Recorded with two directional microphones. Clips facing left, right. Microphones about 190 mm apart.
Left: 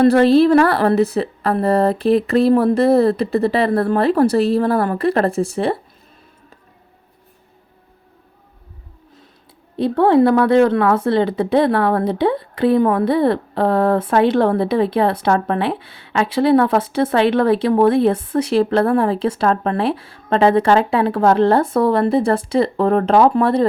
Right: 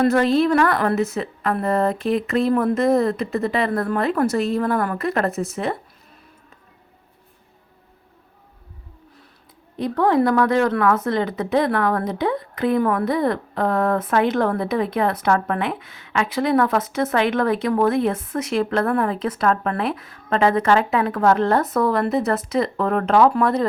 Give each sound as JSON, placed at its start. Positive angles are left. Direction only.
{"t": 0.0, "sound": "a woman's voice", "side_deg": 35}
{"t": 9.7, "sound": "a woman's voice", "side_deg": 30}